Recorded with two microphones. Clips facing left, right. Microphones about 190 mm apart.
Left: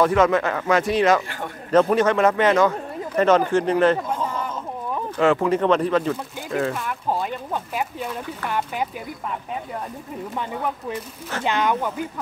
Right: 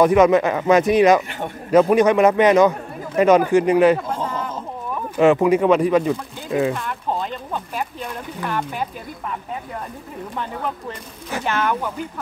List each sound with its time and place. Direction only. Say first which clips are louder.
0.0 s a man's voice: right 4 dB; 15° right (ahead or behind)
5.1 s a man's voice: right 5 dB; 15° right (ahead or behind)
6.7 s speech: right 1 dB; 5° left (ahead or behind)
10.3 s speech: even; 10° left (ahead or behind)